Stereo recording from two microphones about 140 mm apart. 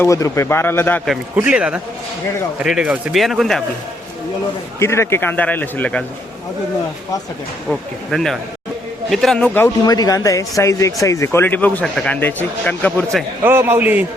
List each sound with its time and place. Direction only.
0.0 s speech: 20° left (ahead or behind)
1.4 s a man's voice: 10° right (ahead or behind)
4.8 s speech: 20° left (ahead or behind)
7.7 s speech: centre (ahead or behind)
9.8 s speech: 30° left (ahead or behind); by 13.1 s 10° left (ahead or behind)
13.4 s a man's voice: 15° right (ahead or behind)